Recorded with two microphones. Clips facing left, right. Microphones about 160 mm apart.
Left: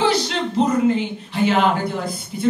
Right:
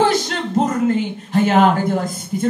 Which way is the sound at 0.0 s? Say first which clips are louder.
Right 2 dB; 45° right (ahead or behind).